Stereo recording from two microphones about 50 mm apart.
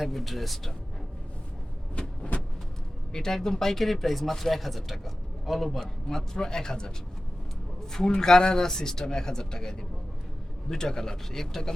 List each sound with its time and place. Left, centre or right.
0.0 s speech: centre
2.0 s vehicle: left
3.1 s speech: centre
5.8 s speech: centre
7.9 s speech: centre